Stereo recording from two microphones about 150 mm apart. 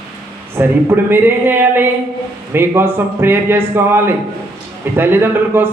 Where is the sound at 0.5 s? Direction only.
15° right (ahead or behind).